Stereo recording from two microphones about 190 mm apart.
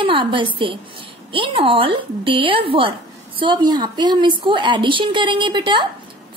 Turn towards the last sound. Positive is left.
turn(degrees=-25)  # may be behind; listen again after turning